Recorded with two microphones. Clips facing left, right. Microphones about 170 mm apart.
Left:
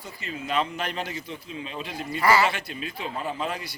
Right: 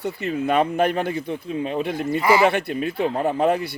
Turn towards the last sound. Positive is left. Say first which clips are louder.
# right 11 dB
turn(degrees=-60)  # may be behind; listen again after turning